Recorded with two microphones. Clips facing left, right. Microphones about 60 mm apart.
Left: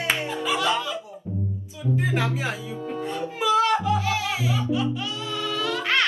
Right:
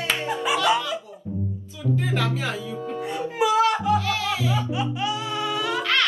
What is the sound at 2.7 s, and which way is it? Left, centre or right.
Speech, centre.